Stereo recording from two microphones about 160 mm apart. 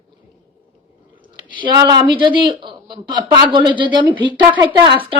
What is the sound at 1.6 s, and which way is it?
Speech, 25° right (ahead or behind).